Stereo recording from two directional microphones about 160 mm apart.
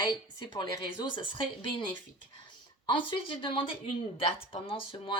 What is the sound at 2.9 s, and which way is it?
Speech, 30° left (ahead or behind).